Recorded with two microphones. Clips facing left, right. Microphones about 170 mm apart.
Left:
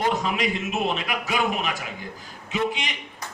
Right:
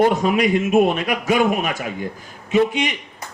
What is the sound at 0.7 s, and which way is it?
A man's voice, 50° right (ahead or behind).